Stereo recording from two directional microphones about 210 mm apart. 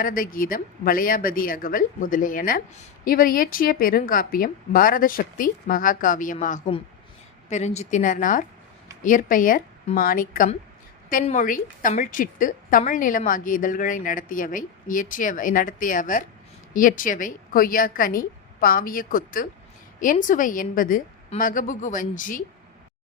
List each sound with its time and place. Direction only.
0.0 s a woman's voice: 40° left (ahead or behind)
6.7 s a woman's voice: 25° left (ahead or behind)